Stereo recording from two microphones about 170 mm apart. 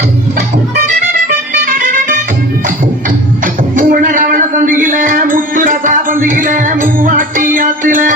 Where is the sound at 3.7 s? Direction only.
50° right (ahead or behind).